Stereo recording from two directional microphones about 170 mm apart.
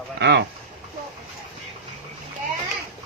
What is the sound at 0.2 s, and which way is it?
Speech, 90° right.